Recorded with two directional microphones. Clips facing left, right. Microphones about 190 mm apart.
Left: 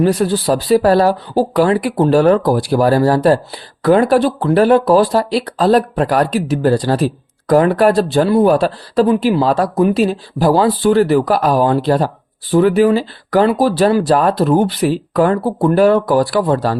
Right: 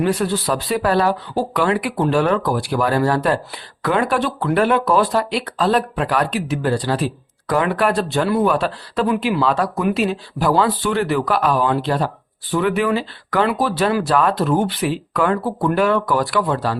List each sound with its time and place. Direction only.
0.0 s speech: 35° left (ahead or behind)